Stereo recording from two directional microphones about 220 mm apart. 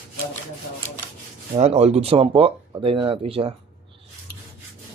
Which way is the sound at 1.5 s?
30° right (ahead or behind).